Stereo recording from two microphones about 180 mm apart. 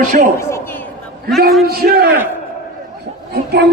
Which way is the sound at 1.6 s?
60° right (ahead or behind).